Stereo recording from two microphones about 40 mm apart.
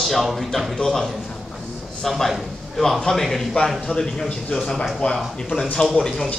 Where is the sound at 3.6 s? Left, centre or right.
Left.